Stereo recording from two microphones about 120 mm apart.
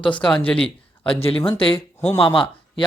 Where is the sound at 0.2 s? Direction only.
5° left (ahead or behind).